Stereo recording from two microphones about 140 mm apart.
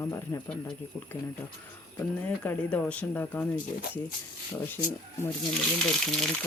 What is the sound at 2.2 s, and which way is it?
Speech, 10° left (ahead or behind).